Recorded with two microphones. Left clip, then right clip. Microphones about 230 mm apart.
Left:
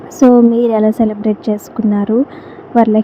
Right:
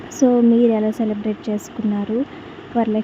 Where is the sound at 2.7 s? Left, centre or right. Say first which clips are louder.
Left 9 dB; centre.